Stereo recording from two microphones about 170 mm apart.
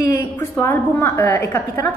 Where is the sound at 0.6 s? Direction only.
15° left (ahead or behind).